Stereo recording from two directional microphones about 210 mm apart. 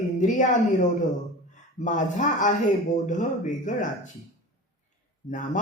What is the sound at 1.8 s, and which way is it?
Speech, 35° left (ahead or behind).